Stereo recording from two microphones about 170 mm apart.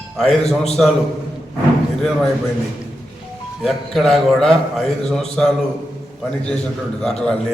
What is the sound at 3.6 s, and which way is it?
A man's voice, centre (ahead or behind).